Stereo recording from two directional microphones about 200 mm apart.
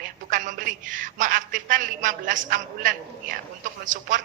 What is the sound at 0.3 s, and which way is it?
A man's voice, 40° right (ahead or behind).